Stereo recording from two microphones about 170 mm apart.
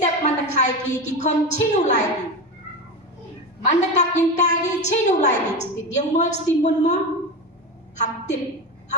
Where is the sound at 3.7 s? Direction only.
45° left (ahead or behind).